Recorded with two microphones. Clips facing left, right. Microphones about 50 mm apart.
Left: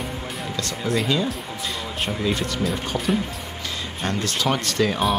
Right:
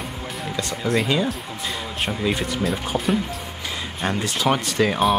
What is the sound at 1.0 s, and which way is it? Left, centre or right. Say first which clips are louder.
Speech: right 1 dB; centre.